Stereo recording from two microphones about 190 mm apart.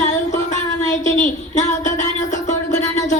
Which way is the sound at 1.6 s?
40° left (ahead or behind).